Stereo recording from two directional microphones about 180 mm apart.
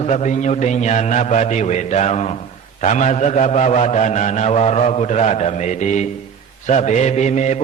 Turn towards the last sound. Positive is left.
turn(degrees=40)  # may be behind; listen again after turning